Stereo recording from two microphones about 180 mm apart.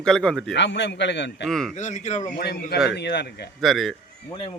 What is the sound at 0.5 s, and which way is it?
Speech, 75° left (ahead or behind).